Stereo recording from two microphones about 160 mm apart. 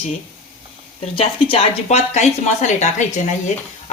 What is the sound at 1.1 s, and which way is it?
Speech, 35° left (ahead or behind).